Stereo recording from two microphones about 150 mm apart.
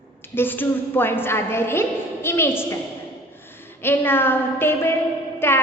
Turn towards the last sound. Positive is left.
turn(degrees=15)  # may be behind; listen again after turning